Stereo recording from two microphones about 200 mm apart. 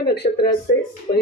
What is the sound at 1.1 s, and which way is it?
Speech, 30° left (ahead or behind).